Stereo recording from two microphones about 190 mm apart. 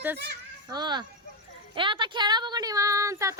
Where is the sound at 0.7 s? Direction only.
20° right (ahead or behind).